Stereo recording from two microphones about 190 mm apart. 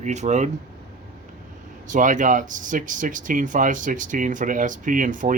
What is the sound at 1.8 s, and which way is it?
Speech, 40° right (ahead or behind).